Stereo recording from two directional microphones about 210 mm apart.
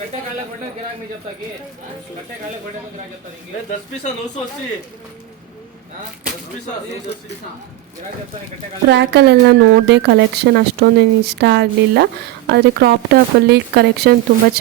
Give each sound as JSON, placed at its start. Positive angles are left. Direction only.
{"t": 8.9, "sound": "a woman's voice", "side_deg": -55}